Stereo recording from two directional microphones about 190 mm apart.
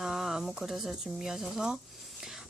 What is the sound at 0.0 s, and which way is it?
Speech, centre (ahead or behind).